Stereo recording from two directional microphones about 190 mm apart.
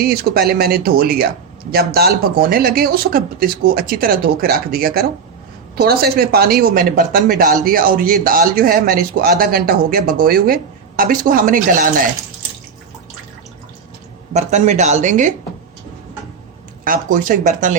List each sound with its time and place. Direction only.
0.0 s speech: 55° right (ahead or behind)
14.3 s speech: 35° right (ahead or behind)
16.8 s speech: 45° right (ahead or behind)